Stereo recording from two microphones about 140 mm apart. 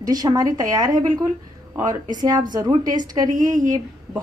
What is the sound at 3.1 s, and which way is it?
Speech, 25° right (ahead or behind).